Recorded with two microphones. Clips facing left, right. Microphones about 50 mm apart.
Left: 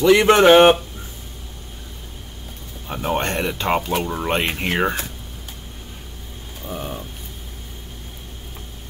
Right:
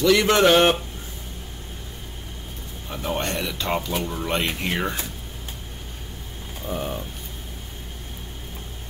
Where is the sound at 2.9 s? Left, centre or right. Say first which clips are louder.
Left 4 dB; left.